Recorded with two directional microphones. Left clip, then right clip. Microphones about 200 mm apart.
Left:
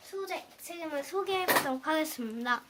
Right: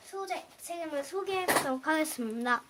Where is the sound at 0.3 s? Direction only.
5° right (ahead or behind); by 2.6 s 25° right (ahead or behind).